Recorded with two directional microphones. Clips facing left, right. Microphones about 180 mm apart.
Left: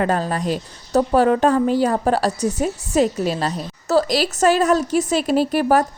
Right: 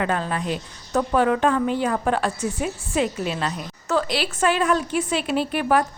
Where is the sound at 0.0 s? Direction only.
40° left (ahead or behind).